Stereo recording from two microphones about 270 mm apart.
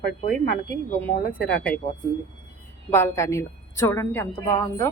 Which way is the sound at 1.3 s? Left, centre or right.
Centre.